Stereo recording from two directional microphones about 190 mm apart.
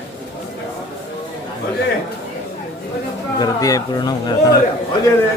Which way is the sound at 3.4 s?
20° left (ahead or behind).